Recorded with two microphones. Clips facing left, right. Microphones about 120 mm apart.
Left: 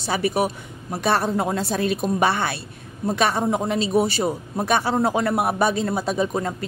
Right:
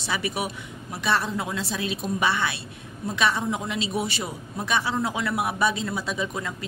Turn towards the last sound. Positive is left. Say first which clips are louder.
# left 7 dB
turn(degrees=40)  # may be behind; listen again after turning